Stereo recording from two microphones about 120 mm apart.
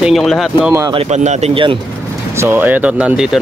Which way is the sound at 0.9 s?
70° right (ahead or behind).